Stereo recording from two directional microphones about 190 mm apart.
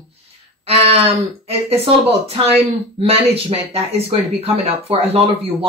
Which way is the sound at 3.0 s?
30° right (ahead or behind).